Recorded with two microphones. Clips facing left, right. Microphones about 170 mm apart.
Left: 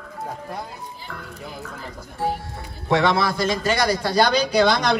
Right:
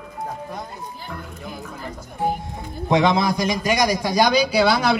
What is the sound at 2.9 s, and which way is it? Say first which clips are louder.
A man's voice: right 1 dB; 15° right (ahead or behind).